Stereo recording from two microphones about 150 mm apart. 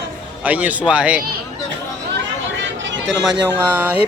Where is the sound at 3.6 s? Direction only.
10° right (ahead or behind).